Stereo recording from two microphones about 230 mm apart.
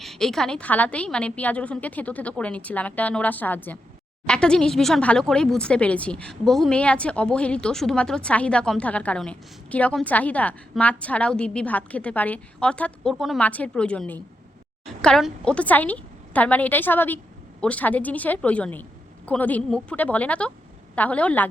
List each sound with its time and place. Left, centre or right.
0.0 s a woman's voice: centre